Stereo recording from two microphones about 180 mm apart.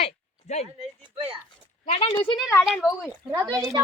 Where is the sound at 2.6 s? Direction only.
Centre (ahead or behind).